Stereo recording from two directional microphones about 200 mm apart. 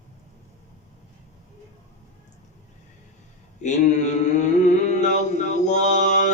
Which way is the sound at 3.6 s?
35° left (ahead or behind).